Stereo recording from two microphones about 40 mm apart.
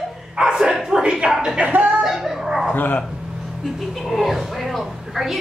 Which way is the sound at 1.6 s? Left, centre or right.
Right.